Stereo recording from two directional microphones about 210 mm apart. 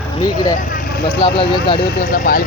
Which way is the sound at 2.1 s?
45° left (ahead or behind).